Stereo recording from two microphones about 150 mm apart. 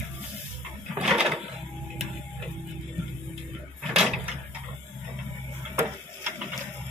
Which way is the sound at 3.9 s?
5° right (ahead or behind).